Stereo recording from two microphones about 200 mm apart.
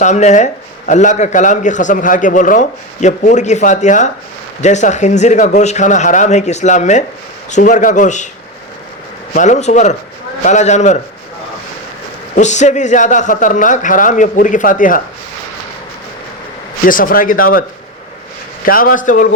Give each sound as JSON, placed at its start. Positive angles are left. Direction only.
{"t": 0.0, "sound": "a man's voice", "side_deg": 35}
{"t": 9.3, "sound": "a man's voice", "side_deg": 40}
{"t": 12.4, "sound": "a man's voice", "side_deg": 35}
{"t": 16.8, "sound": "speech", "side_deg": 45}
{"t": 18.6, "sound": "speech", "side_deg": 45}